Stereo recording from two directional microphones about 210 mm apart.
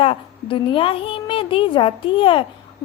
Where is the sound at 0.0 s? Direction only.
25° left (ahead or behind).